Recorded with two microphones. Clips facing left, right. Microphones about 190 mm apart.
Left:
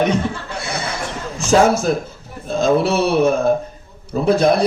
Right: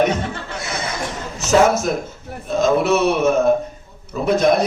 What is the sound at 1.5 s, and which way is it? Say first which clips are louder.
A man's voice: left 1 dB; 30° left (ahead or behind).